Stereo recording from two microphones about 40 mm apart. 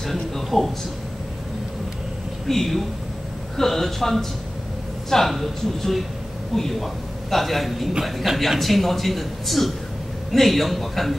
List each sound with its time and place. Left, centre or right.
0.0 s a sound: centre
2.4 s a man's voice: centre
5.3 s a man's voice: centre